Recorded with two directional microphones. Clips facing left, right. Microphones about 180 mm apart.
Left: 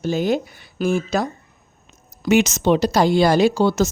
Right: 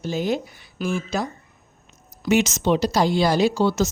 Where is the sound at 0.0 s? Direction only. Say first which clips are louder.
Left 4 dB; 65° left (ahead or behind).